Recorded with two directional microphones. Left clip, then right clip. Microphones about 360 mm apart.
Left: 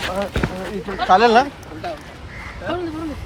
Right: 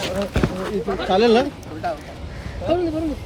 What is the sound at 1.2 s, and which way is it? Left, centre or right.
Speech, centre.